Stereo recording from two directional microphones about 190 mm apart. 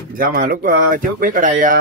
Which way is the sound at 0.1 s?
50° right (ahead or behind).